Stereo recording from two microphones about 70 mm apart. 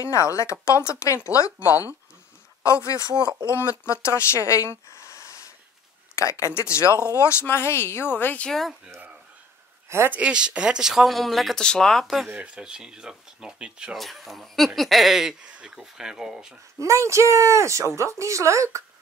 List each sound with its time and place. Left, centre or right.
0.0 s speech: left
2.6 s speech: left
3.3 s speech: right
3.8 s speech: left
9.8 s speech: right
10.1 s speech: centre
12.5 s speech: centre
13.9 s speech: centre
16.7 s speech: right